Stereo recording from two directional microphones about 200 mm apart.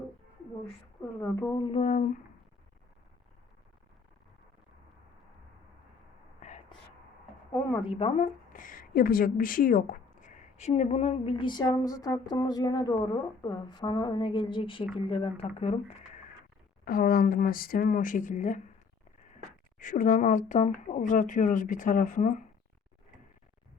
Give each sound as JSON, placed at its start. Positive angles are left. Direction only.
{"t": 1.2, "sound": "a woman's voice", "side_deg": 15}
{"t": 6.4, "sound": "whispering", "side_deg": 40}
{"t": 7.9, "sound": "a woman's voice", "side_deg": 30}
{"t": 16.8, "sound": "speech", "side_deg": 45}
{"t": 19.8, "sound": "speech", "side_deg": 40}